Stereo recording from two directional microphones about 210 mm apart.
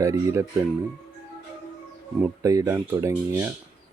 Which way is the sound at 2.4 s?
15° right (ahead or behind).